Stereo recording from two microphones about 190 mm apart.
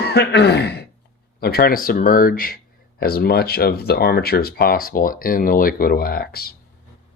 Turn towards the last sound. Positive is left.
turn(degrees=55)  # may be behind; listen again after turning